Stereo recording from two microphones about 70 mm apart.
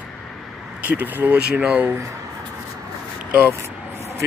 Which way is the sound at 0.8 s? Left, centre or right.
Right.